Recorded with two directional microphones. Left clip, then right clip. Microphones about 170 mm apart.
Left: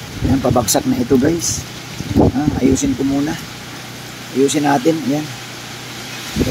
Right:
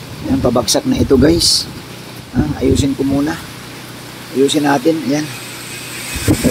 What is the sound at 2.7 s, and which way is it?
Speech, 5° left (ahead or behind).